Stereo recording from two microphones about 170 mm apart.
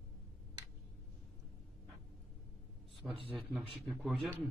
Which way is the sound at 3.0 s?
Centre (ahead or behind).